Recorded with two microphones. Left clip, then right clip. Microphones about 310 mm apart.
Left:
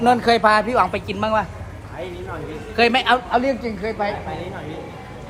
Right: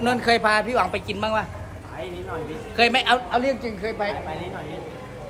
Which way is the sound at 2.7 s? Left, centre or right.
Centre.